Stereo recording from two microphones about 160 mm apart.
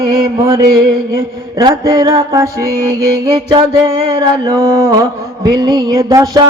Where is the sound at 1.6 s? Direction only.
25° right (ahead or behind).